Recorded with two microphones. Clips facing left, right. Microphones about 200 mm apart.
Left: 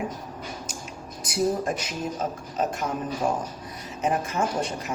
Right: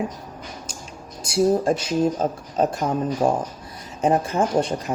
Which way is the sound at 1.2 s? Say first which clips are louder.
Right 6 dB; 30° right (ahead or behind).